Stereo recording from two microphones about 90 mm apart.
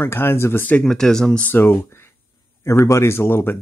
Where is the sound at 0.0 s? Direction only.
25° left (ahead or behind).